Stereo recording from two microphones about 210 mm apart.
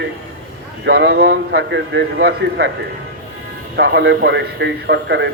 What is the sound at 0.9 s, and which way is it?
Speech, 65° right (ahead or behind).